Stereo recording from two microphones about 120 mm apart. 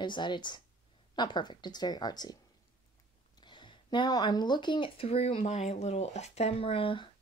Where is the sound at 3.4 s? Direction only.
40° left (ahead or behind).